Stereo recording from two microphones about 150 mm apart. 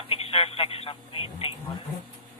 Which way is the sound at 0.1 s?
40° left (ahead or behind).